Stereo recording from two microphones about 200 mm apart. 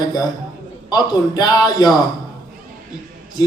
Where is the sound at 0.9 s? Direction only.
20° left (ahead or behind).